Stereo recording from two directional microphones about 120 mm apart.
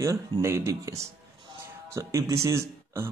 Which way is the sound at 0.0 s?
25° right (ahead or behind).